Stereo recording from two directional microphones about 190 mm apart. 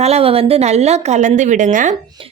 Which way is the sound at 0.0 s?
30° right (ahead or behind).